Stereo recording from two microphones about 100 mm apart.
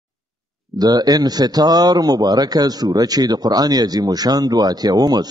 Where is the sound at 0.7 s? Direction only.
40° right (ahead or behind).